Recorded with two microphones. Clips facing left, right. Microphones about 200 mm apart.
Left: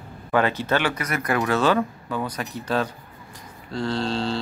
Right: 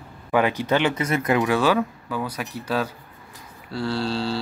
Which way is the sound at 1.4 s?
10° right (ahead or behind).